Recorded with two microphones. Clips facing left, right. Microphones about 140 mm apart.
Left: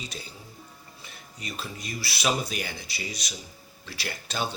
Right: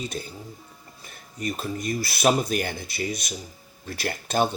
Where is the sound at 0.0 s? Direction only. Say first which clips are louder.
Right 8 dB; 50° right (ahead or behind).